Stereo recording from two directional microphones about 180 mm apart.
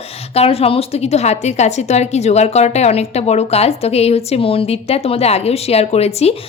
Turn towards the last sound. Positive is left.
turn(degrees=35)  # may be behind; listen again after turning